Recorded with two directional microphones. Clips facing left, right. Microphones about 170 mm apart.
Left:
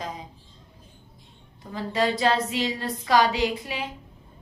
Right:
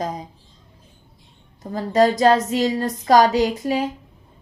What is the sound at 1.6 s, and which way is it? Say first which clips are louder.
A woman's voice: right 8 dB; 40° right (ahead or behind).